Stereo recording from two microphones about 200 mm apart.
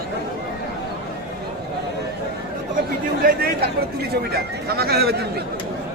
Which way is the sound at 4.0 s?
50° right (ahead or behind).